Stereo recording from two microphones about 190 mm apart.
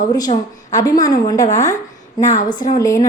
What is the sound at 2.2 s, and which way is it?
Speech, 40° left (ahead or behind).